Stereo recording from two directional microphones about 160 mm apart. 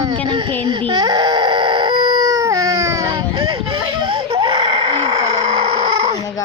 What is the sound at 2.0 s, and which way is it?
Baby cry, 25° right (ahead or behind).